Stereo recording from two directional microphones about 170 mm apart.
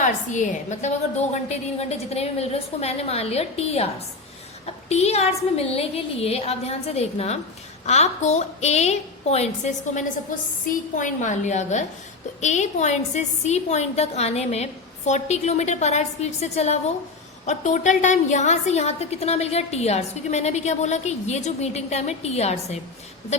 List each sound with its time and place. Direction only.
0.0 s a woman's voice: 45° left (ahead or behind)